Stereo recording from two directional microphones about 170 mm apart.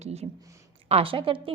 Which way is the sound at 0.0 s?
40° right (ahead or behind).